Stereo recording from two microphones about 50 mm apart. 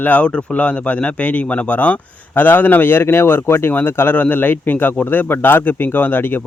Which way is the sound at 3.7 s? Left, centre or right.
Left.